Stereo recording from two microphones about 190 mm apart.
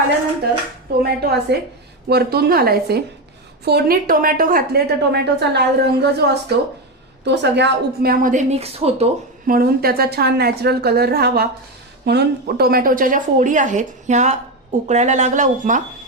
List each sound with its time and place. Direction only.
1.2 s a woman's voice: 60° right (ahead or behind); by 9.0 s 30° right (ahead or behind)
9.5 s a woman's voice: 50° right (ahead or behind)